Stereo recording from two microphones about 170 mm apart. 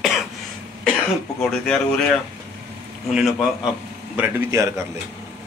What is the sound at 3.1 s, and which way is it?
Speech, centre (ahead or behind).